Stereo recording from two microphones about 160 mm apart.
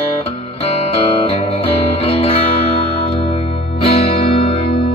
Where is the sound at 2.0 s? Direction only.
40° left (ahead or behind).